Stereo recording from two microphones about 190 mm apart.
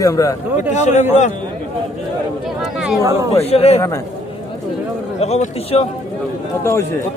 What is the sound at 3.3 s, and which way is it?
Speech, 30° left (ahead or behind).